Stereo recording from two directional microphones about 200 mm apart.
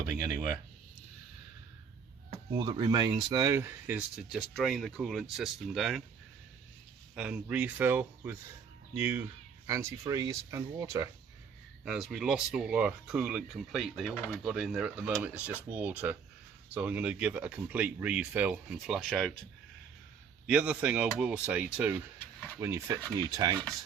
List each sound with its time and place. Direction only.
0.1 s speech: 15° right (ahead or behind)
2.5 s speech: 20° right (ahead or behind); by 6.0 s centre (ahead or behind)
7.2 s speech: 5° right (ahead or behind)
11.9 s speech: 5° right (ahead or behind)
20.5 s speech: 5° right (ahead or behind)